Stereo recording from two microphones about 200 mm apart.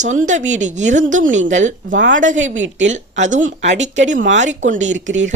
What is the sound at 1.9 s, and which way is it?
A woman's voice, 65° right (ahead or behind).